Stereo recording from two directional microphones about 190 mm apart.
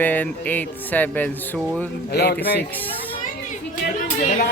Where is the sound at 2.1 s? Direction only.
60° left (ahead or behind).